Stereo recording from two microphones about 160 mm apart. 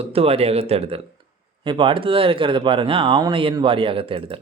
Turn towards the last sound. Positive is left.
turn(degrees=-35)  # may be behind; listen again after turning